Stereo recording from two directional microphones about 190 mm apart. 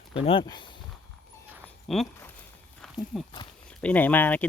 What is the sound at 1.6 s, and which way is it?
Dog, centre (ahead or behind).